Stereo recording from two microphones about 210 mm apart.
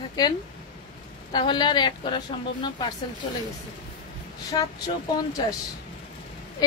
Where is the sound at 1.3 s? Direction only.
20° left (ahead or behind).